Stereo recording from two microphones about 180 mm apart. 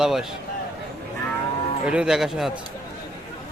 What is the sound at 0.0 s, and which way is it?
Speech, centre (ahead or behind).